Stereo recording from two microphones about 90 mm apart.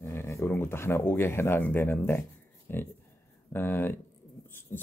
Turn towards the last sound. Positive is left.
turn(degrees=25)  # may be behind; listen again after turning